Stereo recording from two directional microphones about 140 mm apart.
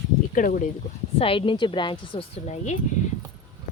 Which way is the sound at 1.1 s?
40° left (ahead or behind).